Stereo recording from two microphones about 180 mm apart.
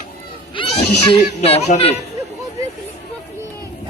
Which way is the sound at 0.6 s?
30° left (ahead or behind).